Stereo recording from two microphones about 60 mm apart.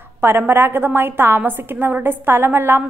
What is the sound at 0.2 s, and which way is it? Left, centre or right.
A woman's voice, right.